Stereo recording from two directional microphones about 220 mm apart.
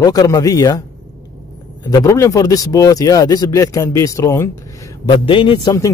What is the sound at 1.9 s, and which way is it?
Speech, 15° left (ahead or behind).